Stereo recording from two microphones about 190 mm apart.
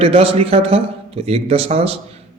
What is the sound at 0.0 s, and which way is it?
Speech, 30° right (ahead or behind).